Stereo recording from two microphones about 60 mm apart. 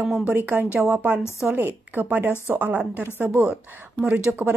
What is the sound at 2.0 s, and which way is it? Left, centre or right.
Speech, right.